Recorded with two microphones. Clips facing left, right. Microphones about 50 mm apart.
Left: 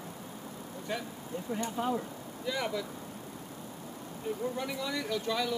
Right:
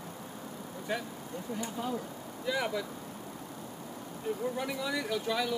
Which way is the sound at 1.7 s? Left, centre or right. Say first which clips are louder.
Left 4 dB; left.